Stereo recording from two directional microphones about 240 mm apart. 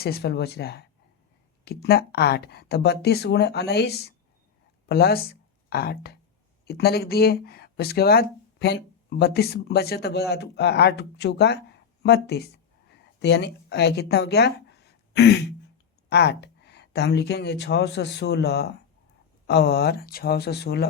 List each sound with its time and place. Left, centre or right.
0.0 s speech: left